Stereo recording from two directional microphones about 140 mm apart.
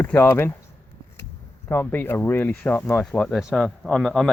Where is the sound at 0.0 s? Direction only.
15° left (ahead or behind).